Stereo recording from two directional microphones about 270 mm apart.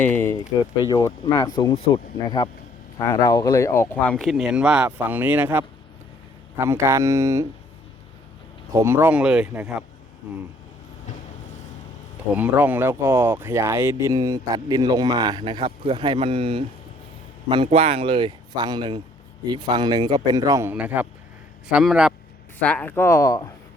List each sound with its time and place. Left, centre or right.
0.0 s speech: centre
6.7 s speech: centre
8.7 s speech: centre
12.3 s speech: centre